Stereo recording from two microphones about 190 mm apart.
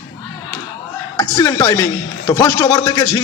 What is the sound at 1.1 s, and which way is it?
A man's voice, 15° left (ahead or behind).